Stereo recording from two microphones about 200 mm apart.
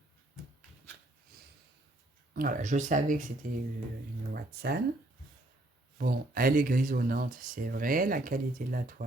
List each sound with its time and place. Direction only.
1.3 s snort: 50° right (ahead or behind)
2.3 s speech: 45° right (ahead or behind)
6.0 s speech: 45° right (ahead or behind)